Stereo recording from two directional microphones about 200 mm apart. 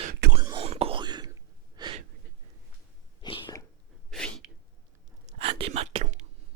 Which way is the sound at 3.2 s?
20° left (ahead or behind).